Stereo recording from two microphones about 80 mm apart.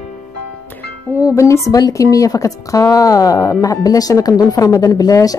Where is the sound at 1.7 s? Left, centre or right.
Left.